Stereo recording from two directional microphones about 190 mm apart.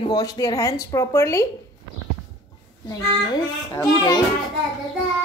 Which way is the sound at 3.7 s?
20° left (ahead or behind).